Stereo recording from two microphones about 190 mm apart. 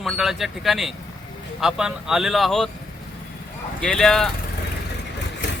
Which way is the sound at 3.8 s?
5° left (ahead or behind).